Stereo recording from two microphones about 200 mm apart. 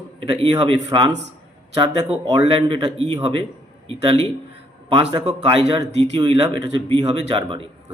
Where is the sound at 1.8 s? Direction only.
25° right (ahead or behind).